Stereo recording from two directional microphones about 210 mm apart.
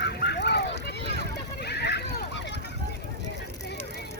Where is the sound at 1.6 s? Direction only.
50° left (ahead or behind).